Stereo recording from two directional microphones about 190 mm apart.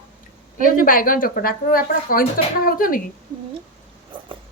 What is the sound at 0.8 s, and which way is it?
Speech, 45° left (ahead or behind).